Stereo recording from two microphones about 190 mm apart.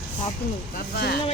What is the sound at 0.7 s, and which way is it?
Speech, 55° left (ahead or behind).